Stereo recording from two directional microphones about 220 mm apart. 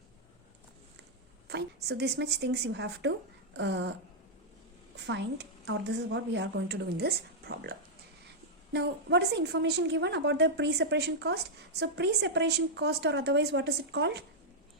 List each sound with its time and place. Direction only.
1.5 s a woman's voice: 50° right (ahead or behind)
5.0 s a woman's voice: 55° right (ahead or behind)